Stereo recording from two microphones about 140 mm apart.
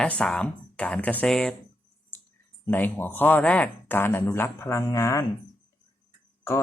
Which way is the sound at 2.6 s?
15° left (ahead or behind).